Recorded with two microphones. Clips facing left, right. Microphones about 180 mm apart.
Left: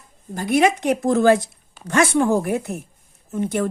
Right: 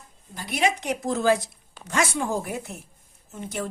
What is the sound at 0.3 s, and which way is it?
A woman's voice, 50° left (ahead or behind).